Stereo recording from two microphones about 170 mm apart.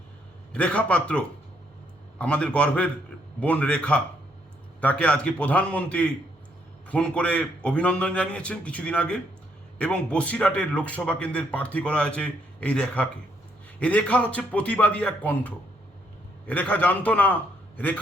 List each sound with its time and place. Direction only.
0.5 s a man's voice: 10° left (ahead or behind)